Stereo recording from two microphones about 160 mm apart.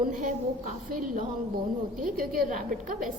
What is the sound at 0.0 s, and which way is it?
A woman's voice, 55° right (ahead or behind).